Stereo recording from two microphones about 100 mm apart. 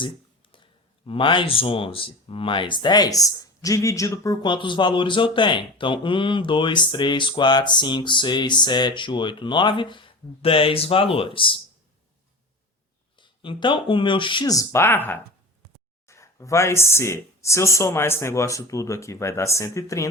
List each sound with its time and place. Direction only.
1.0 s speech: 60° left (ahead or behind); by 4.4 s 35° left (ahead or behind)
4.4 s speech: 50° left (ahead or behind)
13.1 s speech: 55° left (ahead or behind)
14.4 s speech: 35° left (ahead or behind)
16.0 s speech: 30° left (ahead or behind)